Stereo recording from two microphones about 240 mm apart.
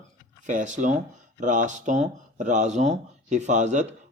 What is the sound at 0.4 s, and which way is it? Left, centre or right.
Speech, right.